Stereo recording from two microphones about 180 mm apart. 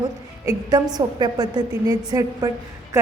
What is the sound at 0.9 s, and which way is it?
A woman's voice, 25° right (ahead or behind).